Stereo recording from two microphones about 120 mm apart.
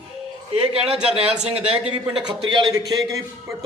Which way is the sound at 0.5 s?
55° right (ahead or behind).